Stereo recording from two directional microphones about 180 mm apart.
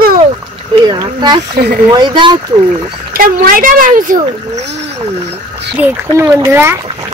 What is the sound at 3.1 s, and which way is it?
Speech, 50° right (ahead or behind).